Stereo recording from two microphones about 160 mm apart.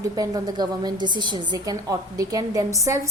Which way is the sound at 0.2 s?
25° right (ahead or behind).